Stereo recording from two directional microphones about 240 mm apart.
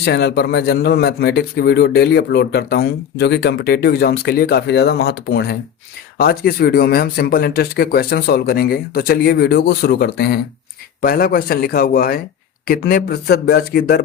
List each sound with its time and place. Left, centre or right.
0.0 s speech: left